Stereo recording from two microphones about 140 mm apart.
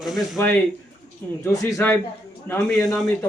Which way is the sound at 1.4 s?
20° left (ahead or behind).